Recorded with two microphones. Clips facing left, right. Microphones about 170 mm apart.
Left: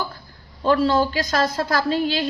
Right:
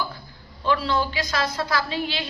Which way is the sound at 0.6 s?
45° left (ahead or behind).